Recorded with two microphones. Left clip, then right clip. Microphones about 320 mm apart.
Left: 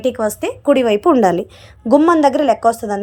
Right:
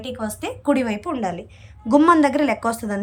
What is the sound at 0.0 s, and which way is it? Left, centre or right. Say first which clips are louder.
A woman's voice: left 11 dB; centre.